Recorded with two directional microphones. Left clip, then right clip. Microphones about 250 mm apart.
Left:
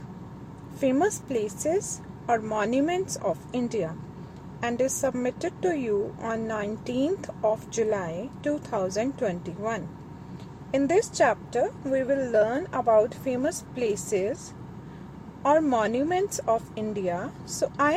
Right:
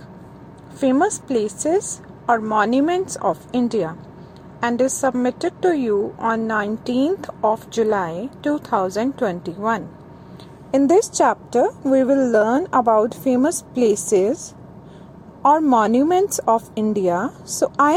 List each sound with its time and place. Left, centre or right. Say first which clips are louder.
0.8 s a woman's voice: right 6 dB; centre; by 14.3 s right
15.4 s speech: right 7 dB; right